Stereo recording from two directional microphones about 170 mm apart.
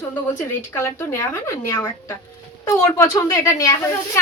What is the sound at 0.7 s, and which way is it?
A woman's voice, 15° left (ahead or behind).